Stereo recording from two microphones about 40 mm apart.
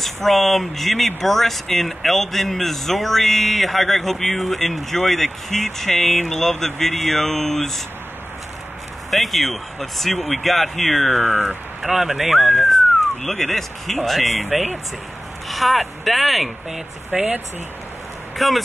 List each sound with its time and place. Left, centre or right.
0.0 s speech: centre
9.1 s speech: centre
12.0 s speech: centre
13.2 s speech: centre
17.1 s speech: right
18.4 s speech: centre